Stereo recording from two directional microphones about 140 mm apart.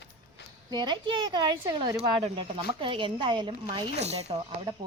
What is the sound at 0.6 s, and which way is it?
Speech, 30° right (ahead or behind).